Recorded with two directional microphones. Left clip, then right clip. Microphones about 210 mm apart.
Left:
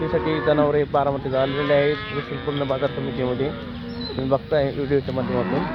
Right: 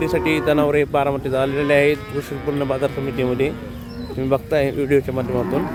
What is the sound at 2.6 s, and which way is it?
Speech, 25° right (ahead or behind).